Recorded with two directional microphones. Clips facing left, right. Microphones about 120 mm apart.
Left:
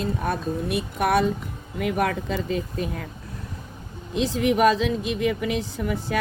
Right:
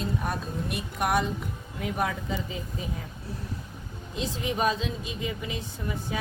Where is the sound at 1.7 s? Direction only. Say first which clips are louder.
Left 6 dB; 85° left.